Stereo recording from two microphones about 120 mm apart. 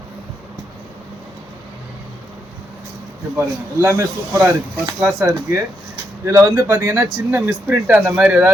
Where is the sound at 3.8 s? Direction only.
20° right (ahead or behind).